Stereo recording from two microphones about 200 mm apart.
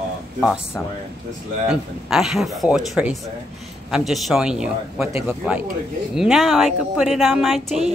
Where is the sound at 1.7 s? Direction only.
5° right (ahead or behind).